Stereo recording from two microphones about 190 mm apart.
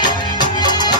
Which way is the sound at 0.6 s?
20° left (ahead or behind).